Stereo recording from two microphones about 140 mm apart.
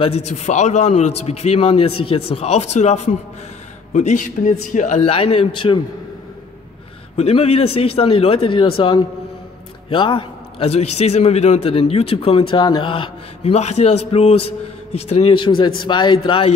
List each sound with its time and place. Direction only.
0.0 s a man's voice: 50° left (ahead or behind)
7.2 s a man's voice: 45° left (ahead or behind)